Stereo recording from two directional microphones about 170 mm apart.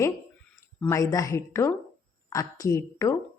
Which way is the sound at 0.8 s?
15° left (ahead or behind).